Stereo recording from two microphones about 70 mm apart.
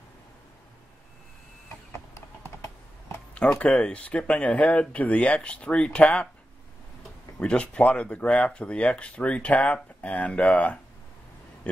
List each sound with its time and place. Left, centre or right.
3.3 s speech: centre
7.3 s speech: centre